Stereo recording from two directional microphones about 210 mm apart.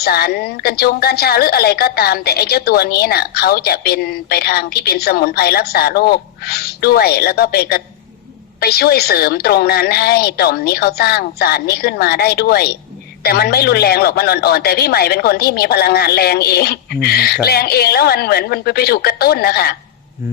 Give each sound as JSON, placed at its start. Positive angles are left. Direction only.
{"t": 0.0, "sound": "a woman's voice", "side_deg": 50}